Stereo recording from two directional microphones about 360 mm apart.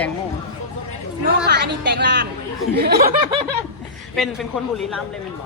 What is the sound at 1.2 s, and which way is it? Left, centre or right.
Speech, right.